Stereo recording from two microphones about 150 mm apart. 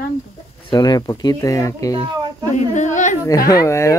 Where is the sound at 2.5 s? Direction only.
50° left (ahead or behind).